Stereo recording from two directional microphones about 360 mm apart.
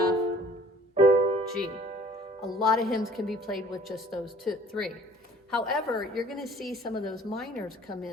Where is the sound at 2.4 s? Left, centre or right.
Centre.